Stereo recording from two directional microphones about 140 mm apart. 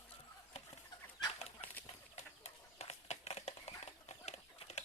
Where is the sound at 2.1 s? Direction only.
50° left (ahead or behind).